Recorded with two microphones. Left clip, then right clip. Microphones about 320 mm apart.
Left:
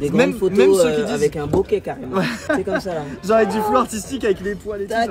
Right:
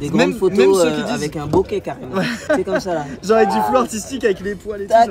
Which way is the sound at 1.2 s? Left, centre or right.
Centre.